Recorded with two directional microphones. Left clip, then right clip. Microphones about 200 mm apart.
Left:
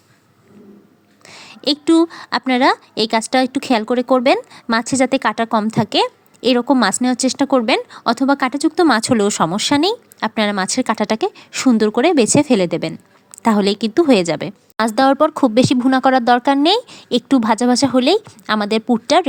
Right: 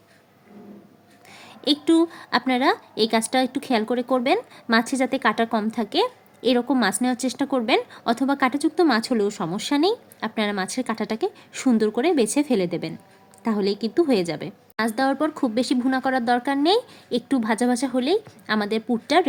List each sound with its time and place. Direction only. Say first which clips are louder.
1.3 s speech: left 4 dB; 30° left (ahead or behind)